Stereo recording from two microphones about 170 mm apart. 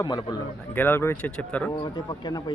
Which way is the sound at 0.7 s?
10° left (ahead or behind).